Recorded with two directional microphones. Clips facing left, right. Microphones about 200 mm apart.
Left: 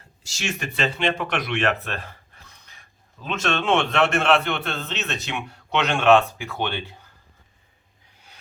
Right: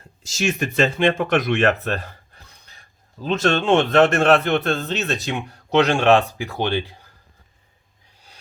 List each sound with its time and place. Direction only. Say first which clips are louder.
0.3 s speech: right 7 dB; 45° right (ahead or behind)